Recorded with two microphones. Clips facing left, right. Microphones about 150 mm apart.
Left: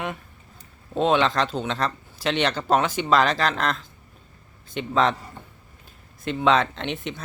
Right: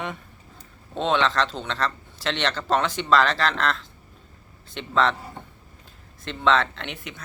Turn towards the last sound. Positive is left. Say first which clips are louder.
# left 6 dB
turn(degrees=25)  # may be behind; listen again after turning